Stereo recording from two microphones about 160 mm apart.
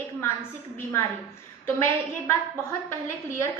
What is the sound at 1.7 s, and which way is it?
Speech, 15° left (ahead or behind).